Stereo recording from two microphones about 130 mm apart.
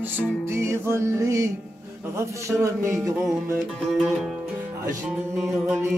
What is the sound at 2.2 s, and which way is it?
Speech, 20° right (ahead or behind).